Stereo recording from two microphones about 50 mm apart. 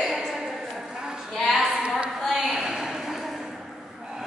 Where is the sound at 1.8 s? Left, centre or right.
Centre.